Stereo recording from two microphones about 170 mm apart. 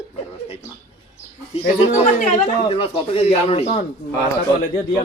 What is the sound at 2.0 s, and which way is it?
Speech, 50° left (ahead or behind).